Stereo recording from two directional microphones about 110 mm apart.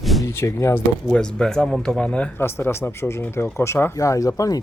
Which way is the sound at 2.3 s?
20° left (ahead or behind).